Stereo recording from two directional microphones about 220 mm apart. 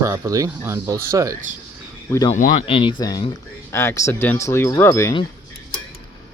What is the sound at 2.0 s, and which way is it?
Speech, 10° left (ahead or behind).